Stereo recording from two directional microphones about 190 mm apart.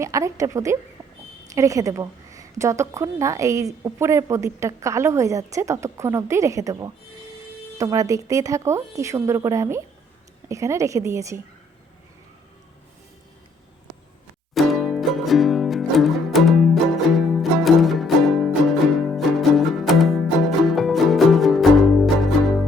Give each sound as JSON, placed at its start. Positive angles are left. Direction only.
{"t": 0.0, "sound": "a woman's voice", "side_deg": -15}
{"t": 14.5, "sound": "music", "side_deg": 0}